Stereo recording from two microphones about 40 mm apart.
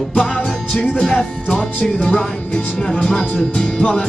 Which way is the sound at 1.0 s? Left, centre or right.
Centre.